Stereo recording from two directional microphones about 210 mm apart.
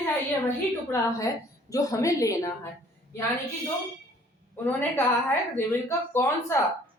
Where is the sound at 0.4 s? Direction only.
15° left (ahead or behind).